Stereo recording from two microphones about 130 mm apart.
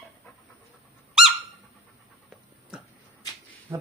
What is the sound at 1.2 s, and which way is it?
Squeak, 5° right (ahead or behind).